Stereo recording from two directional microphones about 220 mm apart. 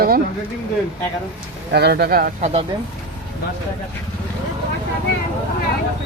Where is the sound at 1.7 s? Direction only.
50° right (ahead or behind).